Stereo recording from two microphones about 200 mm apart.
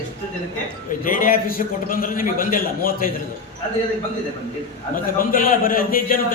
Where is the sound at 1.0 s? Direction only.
45° left (ahead or behind).